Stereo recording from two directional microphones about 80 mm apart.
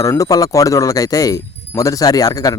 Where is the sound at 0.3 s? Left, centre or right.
Left.